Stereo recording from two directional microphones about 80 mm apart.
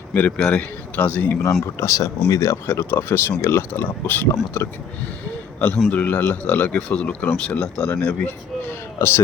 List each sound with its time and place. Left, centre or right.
0.1 s a man's voice: left
1.8 s speech: left
4.3 s a man's voice: left; by 7.9 s centre
7.9 s a man's voice: left